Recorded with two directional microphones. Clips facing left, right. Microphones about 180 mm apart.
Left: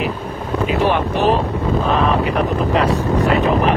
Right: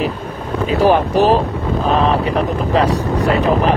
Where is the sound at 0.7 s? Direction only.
35° right (ahead or behind).